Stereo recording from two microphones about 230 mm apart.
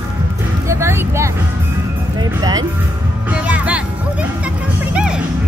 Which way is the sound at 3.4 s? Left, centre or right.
Centre.